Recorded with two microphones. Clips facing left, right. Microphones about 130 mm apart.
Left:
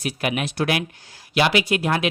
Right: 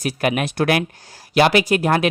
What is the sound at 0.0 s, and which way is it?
Speech, 45° right (ahead or behind).